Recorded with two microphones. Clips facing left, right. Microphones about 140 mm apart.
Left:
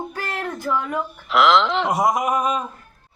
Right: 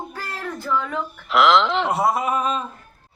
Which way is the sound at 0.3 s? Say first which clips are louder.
Even; 20° left (ahead or behind).